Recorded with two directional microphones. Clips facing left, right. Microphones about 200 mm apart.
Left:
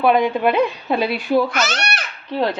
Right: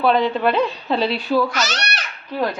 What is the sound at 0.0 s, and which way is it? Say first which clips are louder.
A woman's voice: left 1 dB; 15° left (ahead or behind).